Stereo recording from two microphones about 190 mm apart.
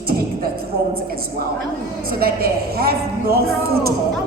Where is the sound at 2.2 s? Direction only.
50° right (ahead or behind).